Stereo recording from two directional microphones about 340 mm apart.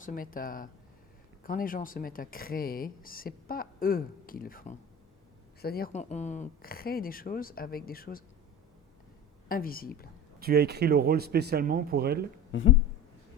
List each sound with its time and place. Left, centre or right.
0.0 s speech: left
9.5 s speech: left
10.4 s speech: right
12.5 s speech: left